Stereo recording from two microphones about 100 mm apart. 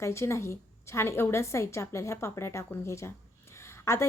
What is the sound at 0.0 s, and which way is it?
A woman's voice, 30° left (ahead or behind).